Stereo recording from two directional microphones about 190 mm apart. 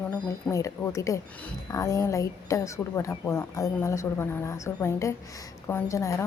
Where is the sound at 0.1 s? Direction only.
5° left (ahead or behind).